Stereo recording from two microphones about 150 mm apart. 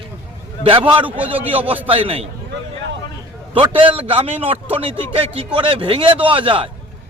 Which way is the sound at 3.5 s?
35° right (ahead or behind).